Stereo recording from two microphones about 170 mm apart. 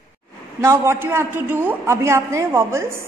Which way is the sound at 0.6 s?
15° right (ahead or behind).